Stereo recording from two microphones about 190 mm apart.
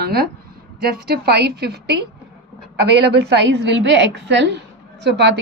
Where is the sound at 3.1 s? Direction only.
65° right (ahead or behind).